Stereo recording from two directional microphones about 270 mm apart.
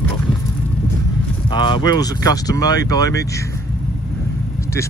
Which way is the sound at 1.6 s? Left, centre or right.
Centre.